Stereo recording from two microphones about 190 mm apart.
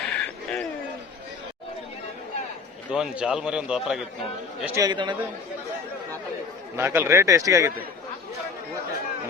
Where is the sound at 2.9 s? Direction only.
5° right (ahead or behind).